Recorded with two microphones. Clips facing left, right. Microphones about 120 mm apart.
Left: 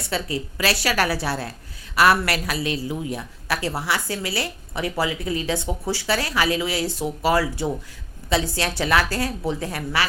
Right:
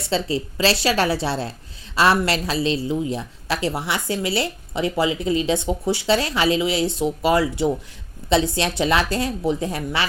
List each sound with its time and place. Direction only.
0.1 s a woman's voice: 25° right (ahead or behind)
8.2 s a sound: 25° right (ahead or behind)
8.5 s a woman's voice: 20° right (ahead or behind)